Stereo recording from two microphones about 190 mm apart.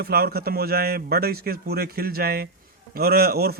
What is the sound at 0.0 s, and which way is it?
A man's voice, 55° right (ahead or behind).